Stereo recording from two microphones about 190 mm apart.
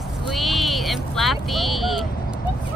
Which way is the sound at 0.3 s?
Centre (ahead or behind).